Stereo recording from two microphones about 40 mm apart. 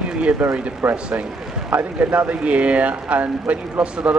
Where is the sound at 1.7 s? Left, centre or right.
Right.